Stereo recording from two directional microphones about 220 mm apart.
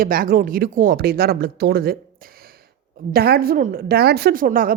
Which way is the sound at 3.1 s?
45° right (ahead or behind).